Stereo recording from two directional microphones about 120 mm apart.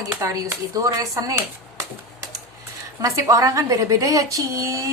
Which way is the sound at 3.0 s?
25° right (ahead or behind).